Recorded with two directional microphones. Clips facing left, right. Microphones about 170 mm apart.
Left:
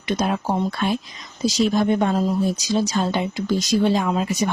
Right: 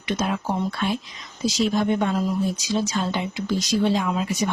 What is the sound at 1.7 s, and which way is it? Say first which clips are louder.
Speech: left 3 dB; 40° left (ahead or behind).